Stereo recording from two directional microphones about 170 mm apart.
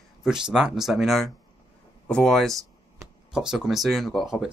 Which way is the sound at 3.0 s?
20° right (ahead or behind).